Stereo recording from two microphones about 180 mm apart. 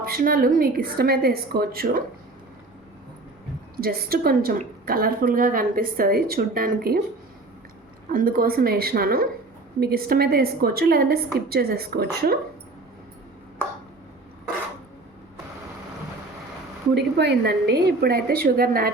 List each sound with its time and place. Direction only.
0.0 s a woman's voice: 55° right (ahead or behind)
3.8 s a woman's voice: 55° right (ahead or behind)
8.1 s a woman's voice: 55° right (ahead or behind)
16.9 s a woman's voice: 65° right (ahead or behind)